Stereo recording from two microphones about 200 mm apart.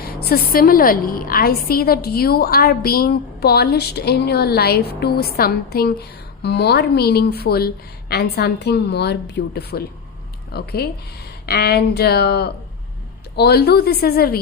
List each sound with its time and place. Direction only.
0.0 s a woman's voice: 50° left (ahead or behind)